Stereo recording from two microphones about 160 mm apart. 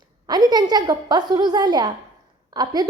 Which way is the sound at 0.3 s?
25° right (ahead or behind).